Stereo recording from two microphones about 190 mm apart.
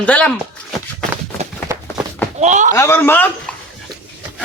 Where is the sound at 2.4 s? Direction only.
40° right (ahead or behind).